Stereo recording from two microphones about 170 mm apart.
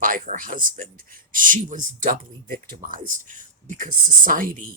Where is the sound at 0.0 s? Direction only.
50° right (ahead or behind).